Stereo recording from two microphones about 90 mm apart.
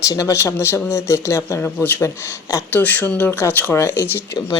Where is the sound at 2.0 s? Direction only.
35° left (ahead or behind).